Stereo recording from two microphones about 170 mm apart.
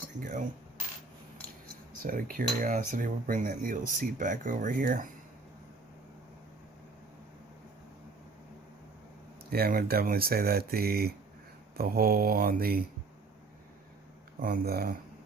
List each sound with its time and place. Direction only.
0.2 s speech: 50° right (ahead or behind)
2.0 s speech: 55° right (ahead or behind)
9.5 s speech: 60° right (ahead or behind)
14.3 s speech: 55° right (ahead or behind)